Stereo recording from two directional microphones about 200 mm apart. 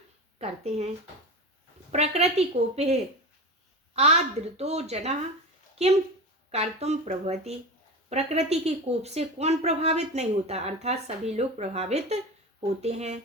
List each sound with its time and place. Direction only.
0.3 s speech: 30° right (ahead or behind)
1.9 s speech: 30° right (ahead or behind)